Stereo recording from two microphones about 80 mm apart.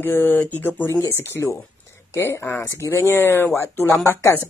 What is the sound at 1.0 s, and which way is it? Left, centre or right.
Speech, left.